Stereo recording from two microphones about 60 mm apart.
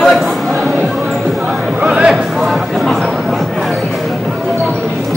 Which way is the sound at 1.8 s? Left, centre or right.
Centre.